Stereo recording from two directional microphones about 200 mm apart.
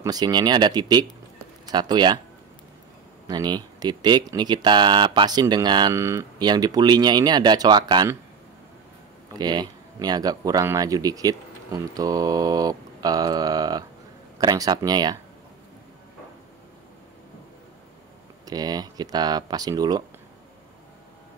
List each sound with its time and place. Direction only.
0.0 s speech: 20° right (ahead or behind)
3.3 s speech: 20° right (ahead or behind)
9.4 s speech: 20° right (ahead or behind)
18.4 s speech: 20° right (ahead or behind)